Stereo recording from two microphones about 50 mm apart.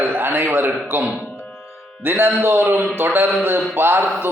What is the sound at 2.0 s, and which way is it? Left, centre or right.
A man's voice, right.